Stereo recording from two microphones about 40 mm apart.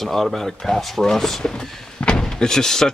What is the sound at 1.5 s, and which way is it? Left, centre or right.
Speech, left.